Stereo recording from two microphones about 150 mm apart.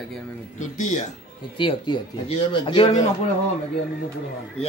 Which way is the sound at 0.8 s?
55° left (ahead or behind).